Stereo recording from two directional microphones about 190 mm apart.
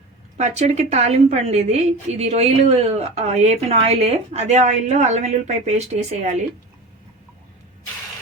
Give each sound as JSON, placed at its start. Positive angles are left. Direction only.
{"t": 0.3, "sound": "a woman's voice", "side_deg": -35}